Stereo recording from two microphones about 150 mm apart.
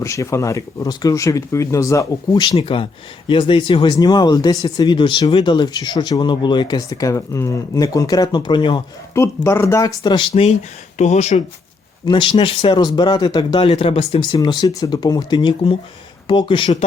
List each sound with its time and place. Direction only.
0.0 s speech: 20° left (ahead or behind)
9.1 s speech: 20° left (ahead or behind)
9.8 s speech: 30° left (ahead or behind)
10.9 s speech: 50° left (ahead or behind)
12.0 s speech: 35° left (ahead or behind)